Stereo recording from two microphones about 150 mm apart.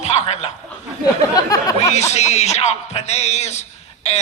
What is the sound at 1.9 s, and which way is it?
Speech, 50° left (ahead or behind).